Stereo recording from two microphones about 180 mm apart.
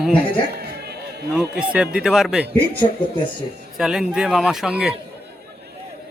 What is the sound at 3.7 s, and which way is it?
Speech, 5° right (ahead or behind).